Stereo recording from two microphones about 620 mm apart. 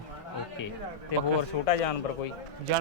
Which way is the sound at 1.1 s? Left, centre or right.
Left.